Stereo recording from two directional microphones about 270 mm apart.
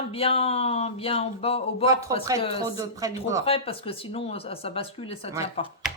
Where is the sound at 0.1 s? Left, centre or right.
Left.